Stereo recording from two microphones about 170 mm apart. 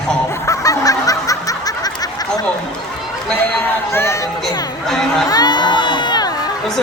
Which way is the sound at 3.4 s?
10° left (ahead or behind).